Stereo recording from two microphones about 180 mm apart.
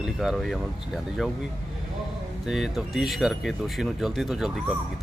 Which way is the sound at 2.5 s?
Centre (ahead or behind).